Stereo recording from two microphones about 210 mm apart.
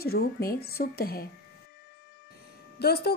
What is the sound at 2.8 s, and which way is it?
Speech, 50° left (ahead or behind).